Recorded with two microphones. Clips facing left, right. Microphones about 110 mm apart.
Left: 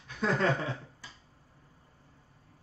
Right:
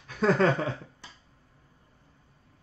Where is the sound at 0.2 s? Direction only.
60° right (ahead or behind).